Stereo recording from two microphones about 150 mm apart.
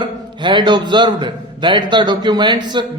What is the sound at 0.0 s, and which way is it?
A man's voice, 30° right (ahead or behind).